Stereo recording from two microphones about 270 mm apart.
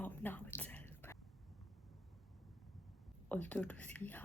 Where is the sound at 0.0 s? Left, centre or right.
Centre.